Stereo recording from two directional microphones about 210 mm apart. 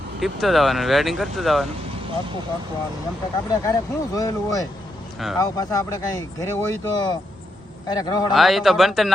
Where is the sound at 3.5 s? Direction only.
15° left (ahead or behind).